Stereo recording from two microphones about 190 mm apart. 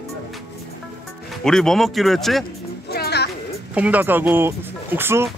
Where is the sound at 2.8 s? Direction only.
55° left (ahead or behind).